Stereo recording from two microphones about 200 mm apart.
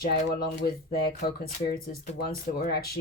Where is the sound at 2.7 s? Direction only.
50° left (ahead or behind).